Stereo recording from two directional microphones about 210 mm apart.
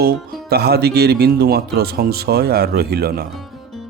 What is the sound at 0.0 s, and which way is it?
Speech, 50° right (ahead or behind).